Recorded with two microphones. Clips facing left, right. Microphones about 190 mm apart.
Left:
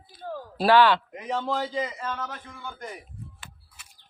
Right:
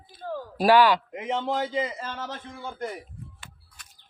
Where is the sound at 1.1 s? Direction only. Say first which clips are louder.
Right 1 dB; 25° right (ahead or behind).